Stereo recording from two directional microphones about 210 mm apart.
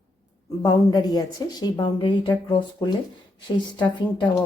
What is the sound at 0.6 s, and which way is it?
A woman's voice, 20° left (ahead or behind).